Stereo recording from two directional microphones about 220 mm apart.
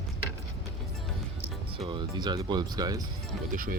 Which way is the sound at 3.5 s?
40° right (ahead or behind).